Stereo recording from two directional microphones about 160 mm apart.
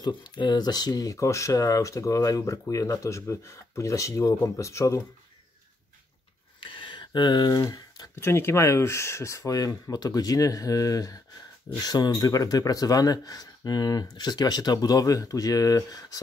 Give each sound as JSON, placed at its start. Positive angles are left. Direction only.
{"t": 0.0, "sound": "speech", "side_deg": 30}
{"t": 6.6, "sound": "a sound", "side_deg": 30}
{"t": 7.7, "sound": "speech", "side_deg": 20}